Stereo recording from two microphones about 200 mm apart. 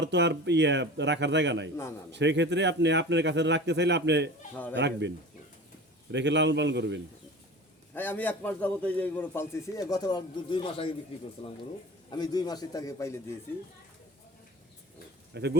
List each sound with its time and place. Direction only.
0.0 s speech: 60° right (ahead or behind)
1.7 s a man's voice: 15° left (ahead or behind)
2.1 s speech: 60° right (ahead or behind)
7.9 s a man's voice: 10° left (ahead or behind)
15.3 s speech: 55° right (ahead or behind)